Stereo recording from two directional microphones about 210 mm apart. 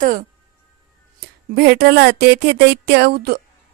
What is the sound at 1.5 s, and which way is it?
A woman's voice, 50° right (ahead or behind).